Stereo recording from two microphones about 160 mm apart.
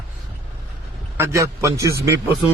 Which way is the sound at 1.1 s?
20° right (ahead or behind).